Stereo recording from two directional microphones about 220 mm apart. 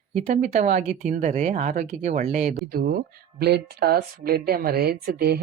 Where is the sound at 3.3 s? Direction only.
45° right (ahead or behind).